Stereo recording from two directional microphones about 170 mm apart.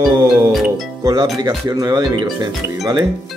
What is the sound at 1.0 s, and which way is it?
Speech, 20° right (ahead or behind).